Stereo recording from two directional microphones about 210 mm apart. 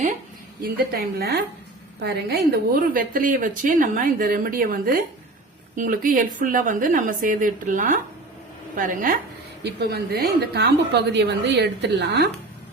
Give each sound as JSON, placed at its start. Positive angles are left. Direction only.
{"t": 0.6, "sound": "a woman's voice", "side_deg": -45}
{"t": 9.6, "sound": "a woman's voice", "side_deg": -50}